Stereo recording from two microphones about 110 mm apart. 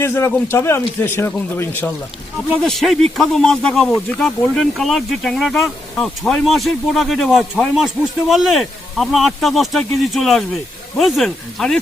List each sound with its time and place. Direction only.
0.0 s a man's voice: 25° left (ahead or behind)
2.6 s speech: centre (ahead or behind)